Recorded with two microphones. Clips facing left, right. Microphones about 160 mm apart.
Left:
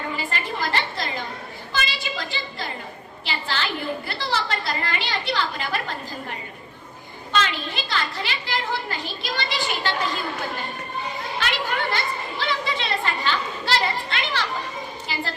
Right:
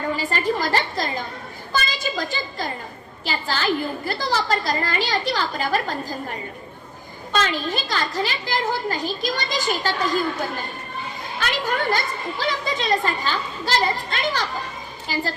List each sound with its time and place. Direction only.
0.2 s a sound: 40° right (ahead or behind)
3.2 s a woman's voice: 40° right (ahead or behind)
7.3 s a woman's voice: 40° right (ahead or behind)
11.3 s a woman's voice: 45° right (ahead or behind)